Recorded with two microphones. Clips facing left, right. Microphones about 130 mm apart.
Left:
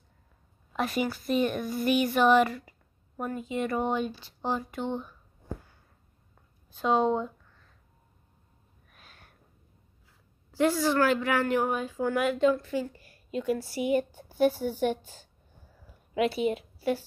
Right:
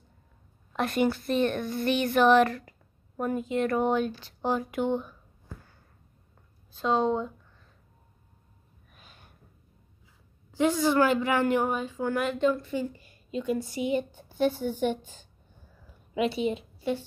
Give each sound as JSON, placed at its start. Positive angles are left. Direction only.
{"t": 0.7, "sound": "a woman's voice", "side_deg": 0}
{"t": 6.8, "sound": "a woman's voice", "side_deg": 10}
{"t": 8.9, "sound": "a sound", "side_deg": 0}
{"t": 10.5, "sound": "a woman's voice", "side_deg": 5}
{"t": 12.8, "sound": "a woman's voice", "side_deg": -20}
{"t": 13.3, "sound": "a woman's voice", "side_deg": 5}
{"t": 16.2, "sound": "a woman's voice", "side_deg": 5}